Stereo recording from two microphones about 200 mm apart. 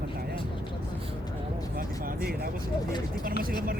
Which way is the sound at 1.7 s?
45° right (ahead or behind).